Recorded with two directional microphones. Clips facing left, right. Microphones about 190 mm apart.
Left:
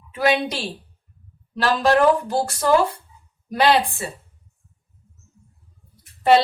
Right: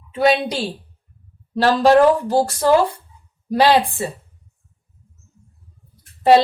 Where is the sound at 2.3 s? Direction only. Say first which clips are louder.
Right 5 dB; 35° right (ahead or behind).